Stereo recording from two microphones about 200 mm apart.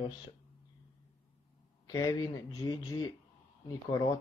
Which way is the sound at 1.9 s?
20° left (ahead or behind).